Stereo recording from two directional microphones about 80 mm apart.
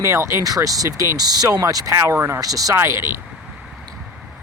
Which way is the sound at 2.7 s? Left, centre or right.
Right.